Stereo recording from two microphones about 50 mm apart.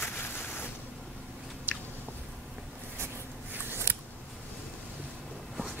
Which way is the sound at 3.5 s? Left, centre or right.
Right.